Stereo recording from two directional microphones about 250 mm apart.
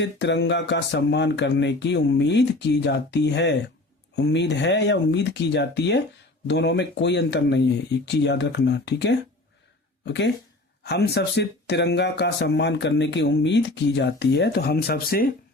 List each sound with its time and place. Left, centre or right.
0.0 s speech: left